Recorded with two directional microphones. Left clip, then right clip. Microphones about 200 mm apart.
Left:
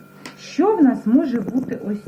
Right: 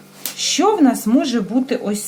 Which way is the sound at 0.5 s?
35° right (ahead or behind).